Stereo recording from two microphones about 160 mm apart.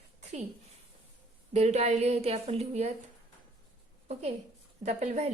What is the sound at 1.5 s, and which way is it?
A woman's voice, 45° right (ahead or behind).